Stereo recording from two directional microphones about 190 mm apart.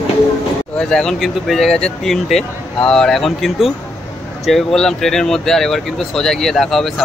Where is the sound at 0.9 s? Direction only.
Centre (ahead or behind).